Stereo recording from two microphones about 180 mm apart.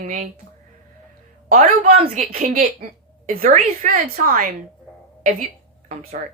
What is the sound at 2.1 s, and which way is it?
Speech, 40° right (ahead or behind).